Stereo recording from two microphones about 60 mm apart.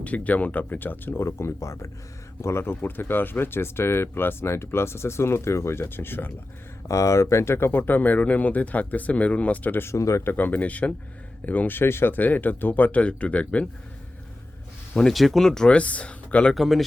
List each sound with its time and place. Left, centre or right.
0.0 s speech: left
1.2 s speech: left
2.4 s speech: left
6.8 s speech: left
9.9 s speech: left
10.2 s speech: left
14.9 s speech: centre
16.6 s speech: centre